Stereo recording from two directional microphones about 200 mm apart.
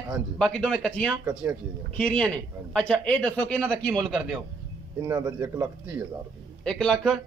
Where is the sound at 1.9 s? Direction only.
5° left (ahead or behind).